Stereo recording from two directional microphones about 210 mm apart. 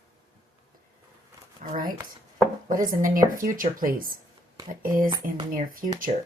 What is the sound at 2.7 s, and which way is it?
Speech, 40° right (ahead or behind).